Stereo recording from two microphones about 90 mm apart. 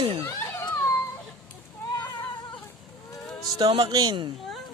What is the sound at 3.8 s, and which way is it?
Speech, 45° right (ahead or behind).